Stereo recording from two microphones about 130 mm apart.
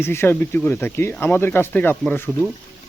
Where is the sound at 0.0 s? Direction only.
20° left (ahead or behind).